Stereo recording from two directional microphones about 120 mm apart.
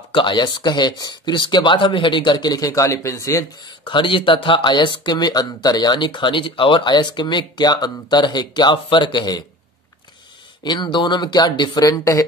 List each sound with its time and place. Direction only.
0.1 s speech: 40° left (ahead or behind); by 3.4 s 25° left (ahead or behind)
3.8 s speech: 45° left (ahead or behind)
10.6 s speech: 40° left (ahead or behind)